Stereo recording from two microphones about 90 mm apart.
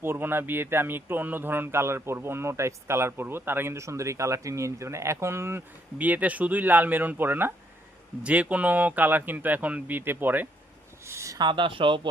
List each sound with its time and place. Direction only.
0.0 s speech: 25° right (ahead or behind)
6.0 s speech: 15° right (ahead or behind)
11.0 s a sound: 30° right (ahead or behind)
11.3 s speech: 60° right (ahead or behind)